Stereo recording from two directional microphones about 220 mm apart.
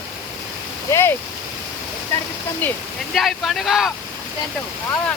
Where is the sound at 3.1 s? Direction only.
Centre (ahead or behind).